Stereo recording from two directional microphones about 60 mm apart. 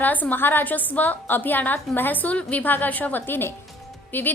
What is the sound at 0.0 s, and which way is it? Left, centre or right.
A woman's voice, left.